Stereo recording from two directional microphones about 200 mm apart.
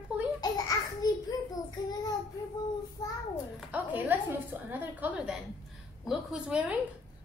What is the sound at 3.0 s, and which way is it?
Speech, 15° left (ahead or behind).